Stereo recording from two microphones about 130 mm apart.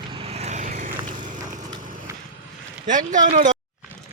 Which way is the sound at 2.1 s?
20° right (ahead or behind).